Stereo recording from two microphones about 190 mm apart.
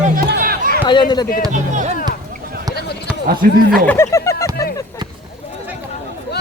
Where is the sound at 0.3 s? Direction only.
55° right (ahead or behind).